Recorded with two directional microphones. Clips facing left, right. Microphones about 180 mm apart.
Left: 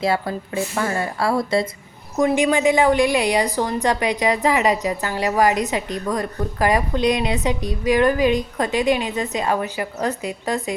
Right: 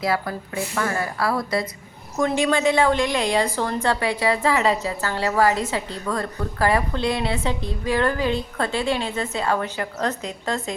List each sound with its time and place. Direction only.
0.0 s a woman's voice: 25° left (ahead or behind)
2.1 s a woman's voice: 15° left (ahead or behind)